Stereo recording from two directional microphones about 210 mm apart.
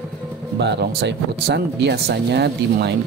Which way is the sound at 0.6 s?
55° right (ahead or behind).